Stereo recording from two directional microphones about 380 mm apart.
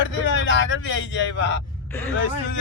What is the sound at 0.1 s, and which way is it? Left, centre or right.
A man's voice, left.